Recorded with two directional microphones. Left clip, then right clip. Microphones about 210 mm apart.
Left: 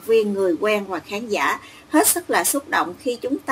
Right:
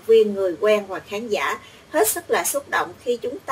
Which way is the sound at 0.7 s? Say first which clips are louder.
Right 2 dB; 40° left (ahead or behind).